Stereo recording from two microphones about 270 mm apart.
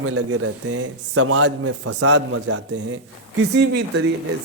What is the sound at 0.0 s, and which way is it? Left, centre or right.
A man's voice, right.